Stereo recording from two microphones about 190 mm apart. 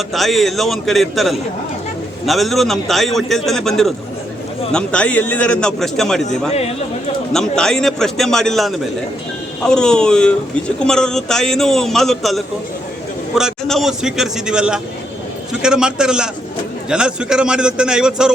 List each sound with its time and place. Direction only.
0.1 s a man's voice: centre (ahead or behind)
6.5 s speech: 35° left (ahead or behind)
7.3 s a man's voice: 5° left (ahead or behind)